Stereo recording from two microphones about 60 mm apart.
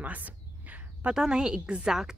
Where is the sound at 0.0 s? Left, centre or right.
Right.